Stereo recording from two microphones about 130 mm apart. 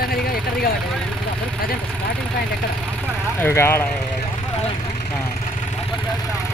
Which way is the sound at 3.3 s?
20° left (ahead or behind).